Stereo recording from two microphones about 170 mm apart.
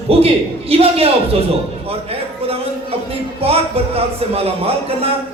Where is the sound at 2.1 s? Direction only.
35° right (ahead or behind).